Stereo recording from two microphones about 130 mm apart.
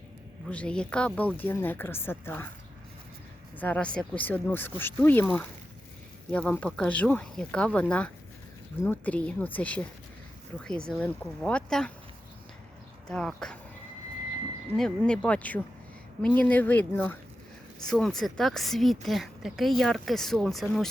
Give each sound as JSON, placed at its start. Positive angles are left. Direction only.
{"t": 0.4, "sound": "speech", "side_deg": 10}
{"t": 3.6, "sound": "speech", "side_deg": 10}
{"t": 6.3, "sound": "a woman's voice", "side_deg": 10}
{"t": 13.1, "sound": "a woman's voice", "side_deg": 5}
{"t": 14.8, "sound": "speech", "side_deg": 5}
{"t": 17.8, "sound": "a woman's voice", "side_deg": 5}